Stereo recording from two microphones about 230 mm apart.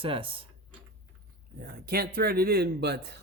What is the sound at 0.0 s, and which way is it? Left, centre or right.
Speech, right.